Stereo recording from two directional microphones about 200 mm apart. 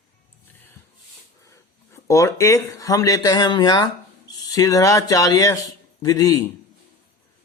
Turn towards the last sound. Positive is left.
turn(degrees=20)  # may be behind; listen again after turning